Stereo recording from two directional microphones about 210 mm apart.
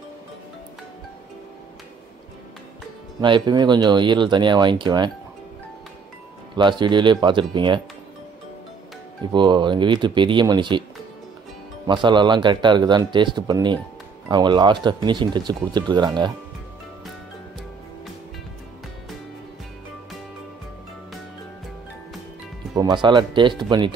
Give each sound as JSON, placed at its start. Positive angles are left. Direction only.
{"t": 3.2, "sound": "speech", "side_deg": -20}
{"t": 6.5, "sound": "speech", "side_deg": -20}
{"t": 9.3, "sound": "speech", "side_deg": -20}
{"t": 11.9, "sound": "speech", "side_deg": -20}
{"t": 22.8, "sound": "speech", "side_deg": -20}